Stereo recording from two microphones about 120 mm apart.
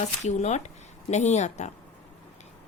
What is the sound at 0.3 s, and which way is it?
Speech, 75° left (ahead or behind).